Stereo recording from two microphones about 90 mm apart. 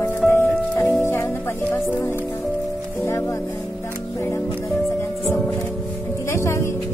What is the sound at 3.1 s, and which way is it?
Speech, 30° left (ahead or behind).